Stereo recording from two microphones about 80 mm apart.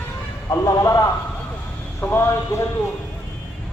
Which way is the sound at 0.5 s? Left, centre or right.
Left.